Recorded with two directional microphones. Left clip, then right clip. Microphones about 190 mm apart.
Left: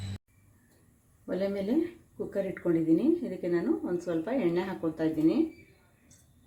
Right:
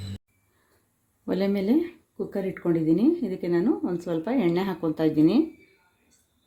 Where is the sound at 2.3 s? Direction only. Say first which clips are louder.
Right 2 dB; 60° right (ahead or behind).